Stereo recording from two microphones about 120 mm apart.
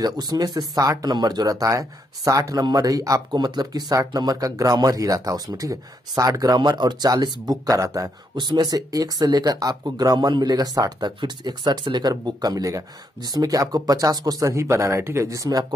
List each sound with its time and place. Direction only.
0.0 s speech: 35° right (ahead or behind)